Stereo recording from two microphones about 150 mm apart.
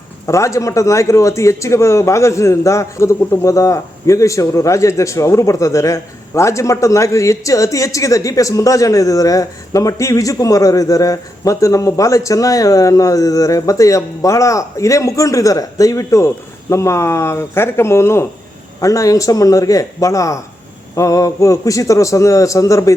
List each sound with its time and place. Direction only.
0.3 s a man's voice: 20° left (ahead or behind)